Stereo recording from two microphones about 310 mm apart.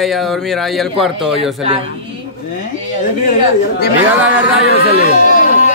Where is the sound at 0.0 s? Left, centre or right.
Centre.